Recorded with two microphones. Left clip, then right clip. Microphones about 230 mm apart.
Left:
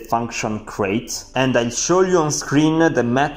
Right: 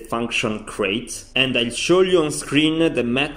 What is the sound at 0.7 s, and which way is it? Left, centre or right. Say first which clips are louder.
Speech: left 2 dB; centre.